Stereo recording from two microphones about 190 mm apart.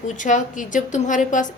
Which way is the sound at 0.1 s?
40° left (ahead or behind).